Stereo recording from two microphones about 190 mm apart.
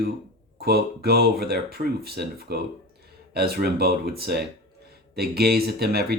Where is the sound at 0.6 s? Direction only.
55° right (ahead or behind).